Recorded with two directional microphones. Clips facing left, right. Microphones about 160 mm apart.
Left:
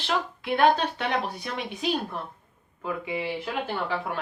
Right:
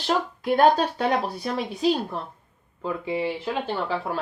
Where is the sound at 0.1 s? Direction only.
40° right (ahead or behind).